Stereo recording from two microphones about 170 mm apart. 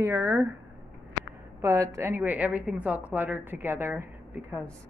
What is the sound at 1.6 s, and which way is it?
A woman's voice, 20° right (ahead or behind).